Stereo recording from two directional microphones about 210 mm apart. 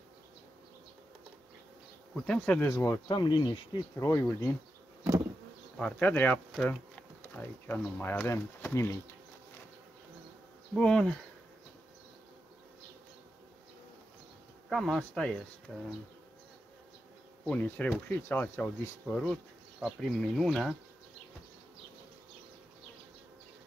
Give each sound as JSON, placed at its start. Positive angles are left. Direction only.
{"t": 2.1, "sound": "speech", "side_deg": 5}
{"t": 5.8, "sound": "speech", "side_deg": 5}
{"t": 10.7, "sound": "speech", "side_deg": 5}
{"t": 14.7, "sound": "speech", "side_deg": 0}
{"t": 17.5, "sound": "speech", "side_deg": 5}